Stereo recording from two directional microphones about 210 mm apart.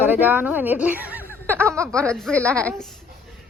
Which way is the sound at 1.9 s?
5° left (ahead or behind).